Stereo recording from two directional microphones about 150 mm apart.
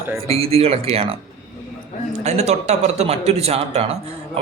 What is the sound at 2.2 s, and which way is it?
A man's voice, 45° right (ahead or behind).